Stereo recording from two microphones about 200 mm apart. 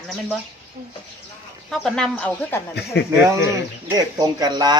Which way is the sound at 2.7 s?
55° left (ahead or behind).